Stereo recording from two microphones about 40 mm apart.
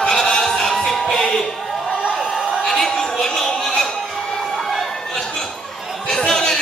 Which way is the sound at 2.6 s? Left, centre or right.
Centre.